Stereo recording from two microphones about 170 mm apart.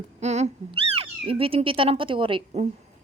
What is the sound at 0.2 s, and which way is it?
Speech, 40° right (ahead or behind).